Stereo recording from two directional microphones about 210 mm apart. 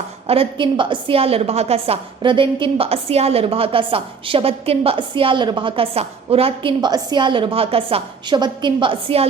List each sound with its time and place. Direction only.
0.3 s a woman's voice: 25° right (ahead or behind)